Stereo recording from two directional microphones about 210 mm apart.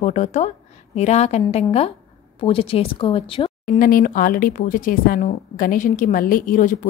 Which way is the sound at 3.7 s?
40° left (ahead or behind).